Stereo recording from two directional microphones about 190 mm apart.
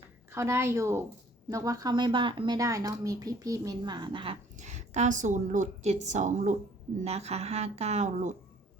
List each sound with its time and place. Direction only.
0.3 s speech: 15° right (ahead or behind)
4.5 s a woman's voice: 40° right (ahead or behind)